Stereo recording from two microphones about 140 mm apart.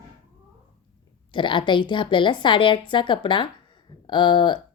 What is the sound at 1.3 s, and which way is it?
A woman's voice, 35° left (ahead or behind).